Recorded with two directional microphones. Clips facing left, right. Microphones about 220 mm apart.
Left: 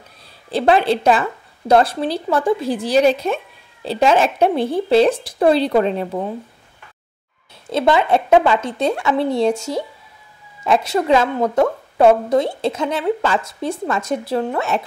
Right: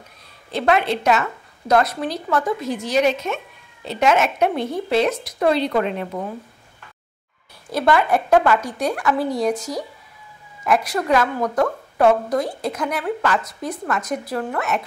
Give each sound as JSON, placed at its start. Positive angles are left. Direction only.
{"t": 0.5, "sound": "a woman's voice", "side_deg": 35}
{"t": 7.7, "sound": "a woman's voice", "side_deg": 20}